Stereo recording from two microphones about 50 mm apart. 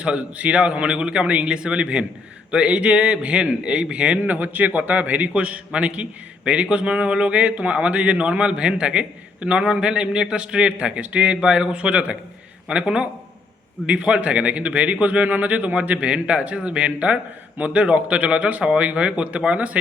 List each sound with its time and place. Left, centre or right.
0.0 s a man's voice: right
4.2 s a man's voice: right